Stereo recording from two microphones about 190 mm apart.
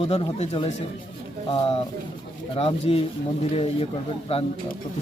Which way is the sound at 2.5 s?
30° left (ahead or behind).